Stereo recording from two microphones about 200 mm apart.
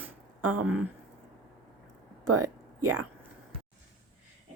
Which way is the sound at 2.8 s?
90° right.